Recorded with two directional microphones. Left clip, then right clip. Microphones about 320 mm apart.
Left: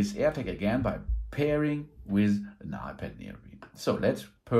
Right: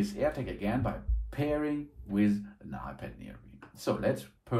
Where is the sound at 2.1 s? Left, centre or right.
Centre.